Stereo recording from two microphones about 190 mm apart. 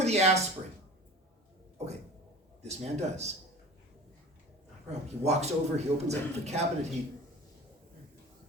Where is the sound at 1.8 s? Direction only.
35° right (ahead or behind).